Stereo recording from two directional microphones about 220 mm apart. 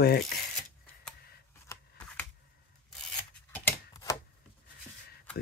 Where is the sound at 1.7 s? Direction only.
15° left (ahead or behind).